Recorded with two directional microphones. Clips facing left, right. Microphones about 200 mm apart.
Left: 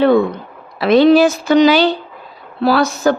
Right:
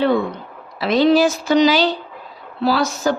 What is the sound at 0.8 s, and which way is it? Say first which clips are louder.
Speech: left 5 dB; 60° left (ahead or behind).